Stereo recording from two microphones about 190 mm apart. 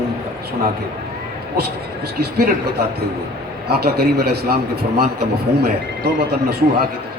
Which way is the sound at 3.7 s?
55° right (ahead or behind).